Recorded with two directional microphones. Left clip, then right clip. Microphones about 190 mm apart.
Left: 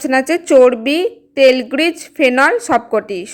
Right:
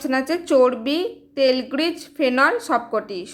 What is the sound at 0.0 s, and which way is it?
Speech, 30° left (ahead or behind).